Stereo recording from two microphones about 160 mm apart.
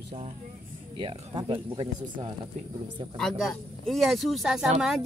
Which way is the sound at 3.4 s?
Centre (ahead or behind).